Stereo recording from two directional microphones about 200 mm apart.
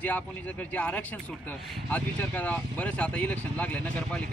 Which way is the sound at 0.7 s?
5° left (ahead or behind).